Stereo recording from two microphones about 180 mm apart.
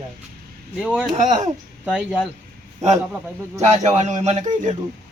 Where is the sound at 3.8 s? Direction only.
40° right (ahead or behind).